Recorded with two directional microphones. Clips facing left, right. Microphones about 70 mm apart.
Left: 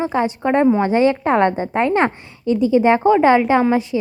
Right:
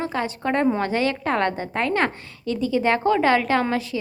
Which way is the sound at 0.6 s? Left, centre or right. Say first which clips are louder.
Left 7 dB; centre.